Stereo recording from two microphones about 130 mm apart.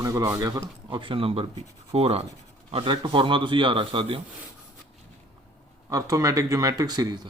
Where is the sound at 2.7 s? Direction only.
40° right (ahead or behind).